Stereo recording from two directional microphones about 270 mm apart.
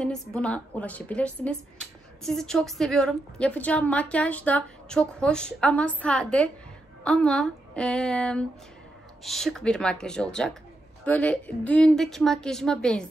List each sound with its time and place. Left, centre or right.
0.0 s a woman's voice: centre